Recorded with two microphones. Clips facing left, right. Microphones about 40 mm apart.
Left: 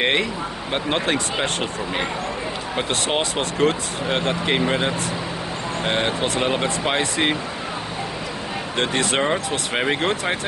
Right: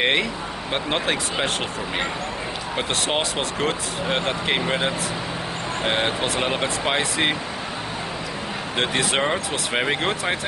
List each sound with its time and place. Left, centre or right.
0.0 s a sound: centre
0.7 s speech: centre
8.7 s speech: centre